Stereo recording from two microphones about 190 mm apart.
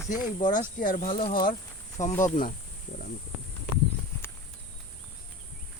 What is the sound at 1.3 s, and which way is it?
Insect, 45° left (ahead or behind).